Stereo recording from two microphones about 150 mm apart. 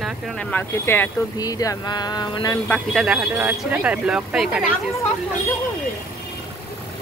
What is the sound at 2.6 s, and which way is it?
Speech, 10° left (ahead or behind).